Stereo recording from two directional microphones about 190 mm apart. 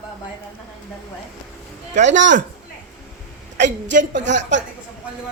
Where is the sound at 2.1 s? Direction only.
70° right (ahead or behind).